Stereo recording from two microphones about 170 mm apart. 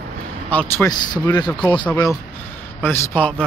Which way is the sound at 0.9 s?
25° left (ahead or behind).